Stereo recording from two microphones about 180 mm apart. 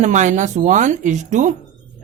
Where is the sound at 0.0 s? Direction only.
40° right (ahead or behind).